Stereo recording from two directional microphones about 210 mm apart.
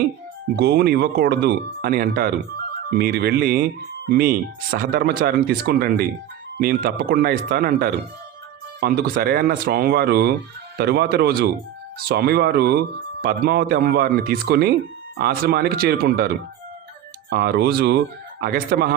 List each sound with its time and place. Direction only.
0.5 s speech: 50° right (ahead or behind)